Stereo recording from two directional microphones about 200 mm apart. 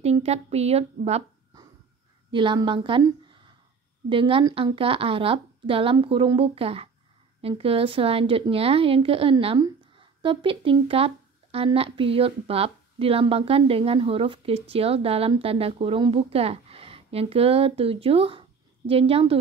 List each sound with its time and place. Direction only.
0.0 s a woman's voice: 30° right (ahead or behind)
2.3 s speech: 25° right (ahead or behind)
4.1 s speech: 25° right (ahead or behind)